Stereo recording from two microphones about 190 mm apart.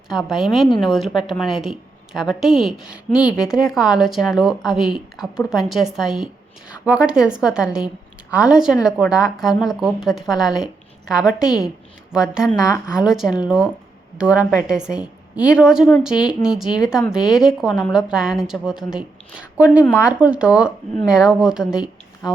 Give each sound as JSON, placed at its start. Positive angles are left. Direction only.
{"t": 0.1, "sound": "a woman's voice", "side_deg": 0}